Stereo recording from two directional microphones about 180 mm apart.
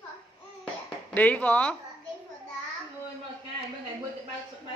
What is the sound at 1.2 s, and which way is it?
Speech, 10° left (ahead or behind).